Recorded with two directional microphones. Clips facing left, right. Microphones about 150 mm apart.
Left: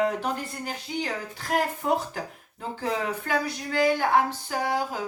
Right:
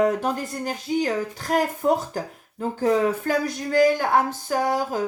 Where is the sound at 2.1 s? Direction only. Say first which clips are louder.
Right 6 dB; 40° right (ahead or behind).